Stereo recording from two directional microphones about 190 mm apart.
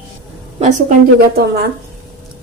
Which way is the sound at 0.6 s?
40° right (ahead or behind).